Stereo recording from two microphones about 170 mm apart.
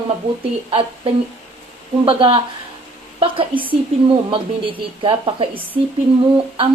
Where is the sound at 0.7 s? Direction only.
30° right (ahead or behind).